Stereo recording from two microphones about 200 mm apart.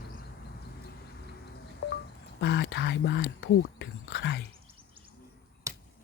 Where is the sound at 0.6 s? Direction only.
55° left (ahead or behind).